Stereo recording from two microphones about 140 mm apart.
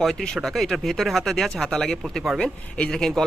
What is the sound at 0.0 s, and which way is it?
Speech, centre (ahead or behind).